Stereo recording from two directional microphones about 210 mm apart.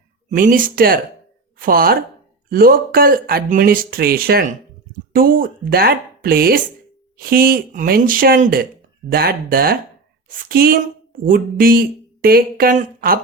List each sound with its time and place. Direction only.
0.3 s a woman's voice: 40° right (ahead or behind)